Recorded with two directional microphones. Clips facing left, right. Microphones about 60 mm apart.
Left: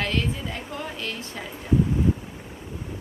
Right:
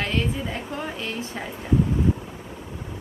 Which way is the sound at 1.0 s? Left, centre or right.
Centre.